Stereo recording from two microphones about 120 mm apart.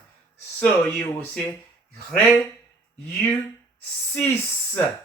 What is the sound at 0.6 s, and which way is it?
Speech, 15° left (ahead or behind).